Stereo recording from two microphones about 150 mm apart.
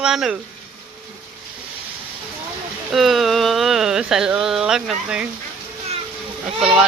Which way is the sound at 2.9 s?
Centre (ahead or behind).